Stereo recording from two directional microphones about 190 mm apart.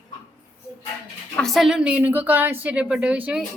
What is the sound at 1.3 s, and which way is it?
A woman's voice, centre (ahead or behind).